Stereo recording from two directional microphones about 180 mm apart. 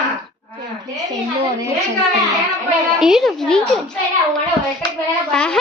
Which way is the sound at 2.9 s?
5° right (ahead or behind).